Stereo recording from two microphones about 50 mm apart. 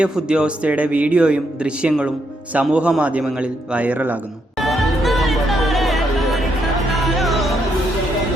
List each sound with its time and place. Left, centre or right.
0.0 s speech: right
4.6 s music: centre